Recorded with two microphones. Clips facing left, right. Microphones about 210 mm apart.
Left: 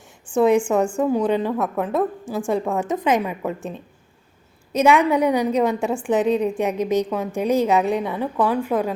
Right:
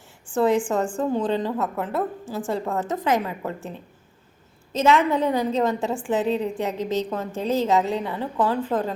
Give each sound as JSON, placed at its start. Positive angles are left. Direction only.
{"t": 0.3, "sound": "a woman's voice", "side_deg": 15}